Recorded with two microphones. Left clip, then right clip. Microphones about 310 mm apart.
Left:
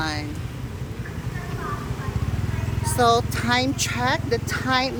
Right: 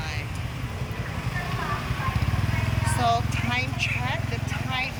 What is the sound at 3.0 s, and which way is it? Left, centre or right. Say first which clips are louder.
Speech: left 6 dB; centre.